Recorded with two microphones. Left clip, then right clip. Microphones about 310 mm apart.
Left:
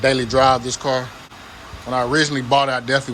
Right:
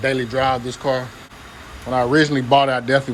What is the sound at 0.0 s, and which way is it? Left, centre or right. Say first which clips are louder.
A man's voice: left 4 dB; centre.